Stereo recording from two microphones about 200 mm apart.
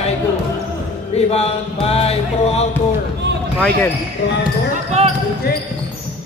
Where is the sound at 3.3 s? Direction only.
55° right (ahead or behind).